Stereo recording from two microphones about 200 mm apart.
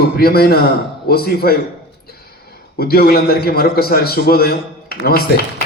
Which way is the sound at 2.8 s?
50° left (ahead or behind).